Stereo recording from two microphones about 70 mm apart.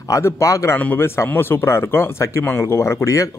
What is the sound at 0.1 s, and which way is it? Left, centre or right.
A man's voice, left.